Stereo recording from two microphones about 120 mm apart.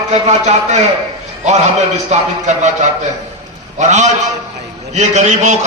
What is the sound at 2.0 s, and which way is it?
Speech, 75° right (ahead or behind).